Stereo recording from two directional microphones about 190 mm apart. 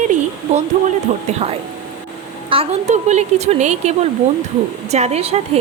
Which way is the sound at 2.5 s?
35° right (ahead or behind).